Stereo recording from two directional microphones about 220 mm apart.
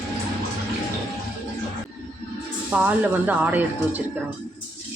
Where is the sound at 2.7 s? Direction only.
5° right (ahead or behind).